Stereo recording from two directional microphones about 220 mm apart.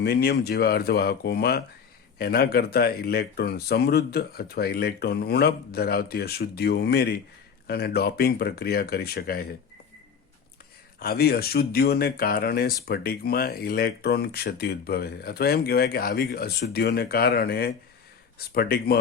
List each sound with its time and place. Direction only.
0.0 s speech: 45° left (ahead or behind)
11.0 s speech: 45° left (ahead or behind)